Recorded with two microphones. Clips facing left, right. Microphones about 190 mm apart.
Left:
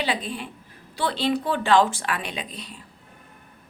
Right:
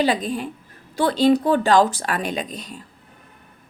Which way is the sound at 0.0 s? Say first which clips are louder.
Right 7 dB; 40° right (ahead or behind).